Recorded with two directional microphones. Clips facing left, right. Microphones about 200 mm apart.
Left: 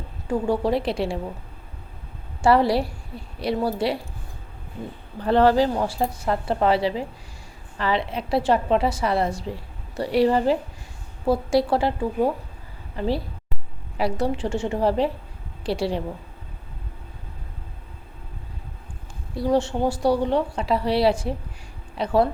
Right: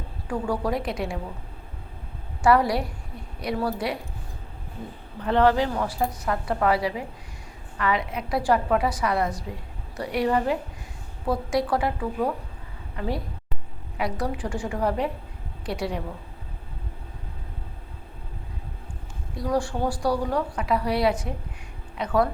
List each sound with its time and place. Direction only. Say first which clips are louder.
0.3 s a woman's voice: left 4 dB; 25° left (ahead or behind)
2.4 s a woman's voice: left 2 dB; 30° left (ahead or behind)
5.2 s a woman's voice: left 3 dB; 35° left (ahead or behind)
19.3 s a woman's voice: left 4 dB; 30° left (ahead or behind)